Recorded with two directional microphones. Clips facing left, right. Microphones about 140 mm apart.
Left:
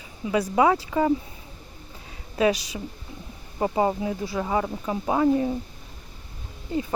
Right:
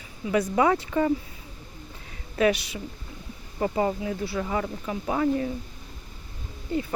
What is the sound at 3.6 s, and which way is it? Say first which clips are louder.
Speech: left 2 dB; 25° left (ahead or behind).